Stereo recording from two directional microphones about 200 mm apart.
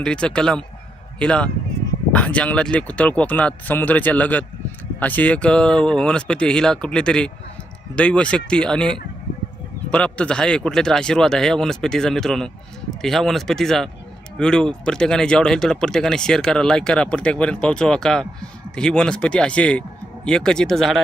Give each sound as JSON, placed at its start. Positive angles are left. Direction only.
{"t": 0.0, "sound": "speech", "side_deg": 5}